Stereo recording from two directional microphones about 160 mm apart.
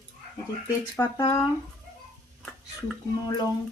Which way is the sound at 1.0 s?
10° left (ahead or behind).